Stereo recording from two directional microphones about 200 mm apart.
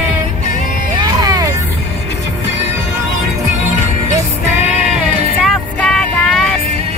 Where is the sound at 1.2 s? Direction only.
15° right (ahead or behind).